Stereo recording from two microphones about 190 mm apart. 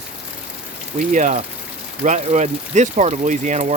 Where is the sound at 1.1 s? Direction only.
40° right (ahead or behind).